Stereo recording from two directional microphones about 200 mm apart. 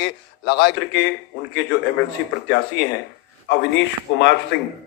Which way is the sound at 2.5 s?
60° left (ahead or behind).